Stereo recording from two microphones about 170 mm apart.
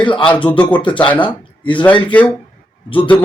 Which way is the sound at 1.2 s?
30° left (ahead or behind).